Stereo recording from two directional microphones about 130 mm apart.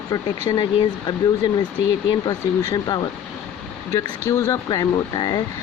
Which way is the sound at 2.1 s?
30° left (ahead or behind).